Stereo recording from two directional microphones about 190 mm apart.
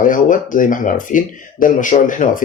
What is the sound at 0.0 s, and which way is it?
Speech, 45° left (ahead or behind).